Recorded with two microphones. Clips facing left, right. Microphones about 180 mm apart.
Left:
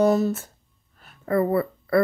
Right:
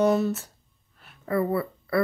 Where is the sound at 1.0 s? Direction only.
45° left (ahead or behind).